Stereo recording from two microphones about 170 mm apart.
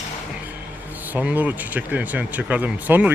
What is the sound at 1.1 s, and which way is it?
Speech, 10° right (ahead or behind).